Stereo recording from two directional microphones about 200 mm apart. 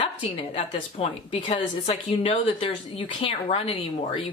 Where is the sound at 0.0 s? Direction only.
25° left (ahead or behind).